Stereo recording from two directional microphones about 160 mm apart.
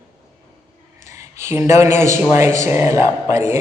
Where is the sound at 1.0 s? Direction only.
20° right (ahead or behind).